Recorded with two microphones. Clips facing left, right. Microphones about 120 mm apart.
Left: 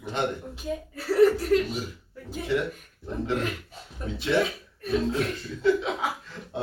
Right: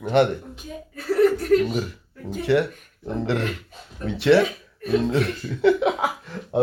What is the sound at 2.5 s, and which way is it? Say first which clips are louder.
Speech: right 7 dB; 75° right (ahead or behind).